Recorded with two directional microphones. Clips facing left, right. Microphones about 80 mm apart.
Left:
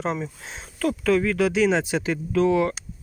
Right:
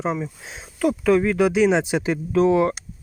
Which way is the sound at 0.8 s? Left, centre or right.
Centre.